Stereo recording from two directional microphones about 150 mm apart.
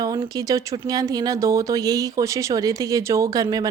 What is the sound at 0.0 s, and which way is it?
A woman's voice, 25° right (ahead or behind).